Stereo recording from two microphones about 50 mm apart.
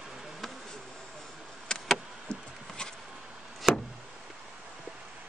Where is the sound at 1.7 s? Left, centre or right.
Centre.